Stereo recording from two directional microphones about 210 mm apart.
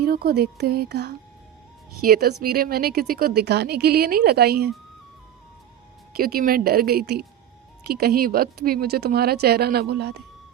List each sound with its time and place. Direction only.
0.0 s a woman's voice: 45° right (ahead or behind)
6.1 s a woman's voice: 45° right (ahead or behind)